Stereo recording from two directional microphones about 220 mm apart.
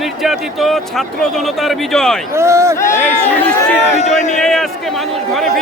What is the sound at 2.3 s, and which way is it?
Speech, 10° right (ahead or behind).